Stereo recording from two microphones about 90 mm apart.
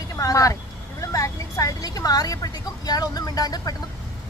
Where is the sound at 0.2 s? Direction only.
40° left (ahead or behind).